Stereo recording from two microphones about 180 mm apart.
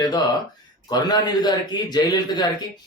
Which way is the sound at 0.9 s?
25° left (ahead or behind).